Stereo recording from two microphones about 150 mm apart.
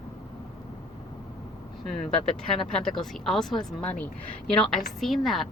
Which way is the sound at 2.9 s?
Centre (ahead or behind).